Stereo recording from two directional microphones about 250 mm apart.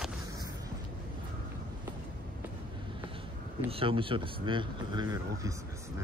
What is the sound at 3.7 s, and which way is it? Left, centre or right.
Speech, right.